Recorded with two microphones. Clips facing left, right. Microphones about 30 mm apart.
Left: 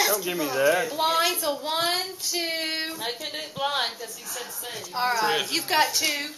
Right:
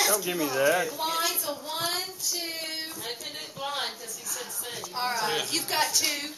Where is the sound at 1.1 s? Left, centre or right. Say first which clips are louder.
Left 8 dB; centre.